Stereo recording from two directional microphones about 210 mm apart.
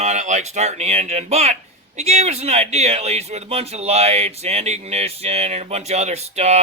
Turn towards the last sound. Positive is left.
turn(degrees=-30)  # may be behind; listen again after turning